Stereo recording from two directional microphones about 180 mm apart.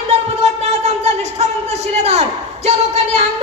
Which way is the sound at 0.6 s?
40° right (ahead or behind).